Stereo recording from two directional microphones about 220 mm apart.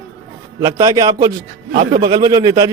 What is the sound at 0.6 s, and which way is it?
Speech, 20° right (ahead or behind).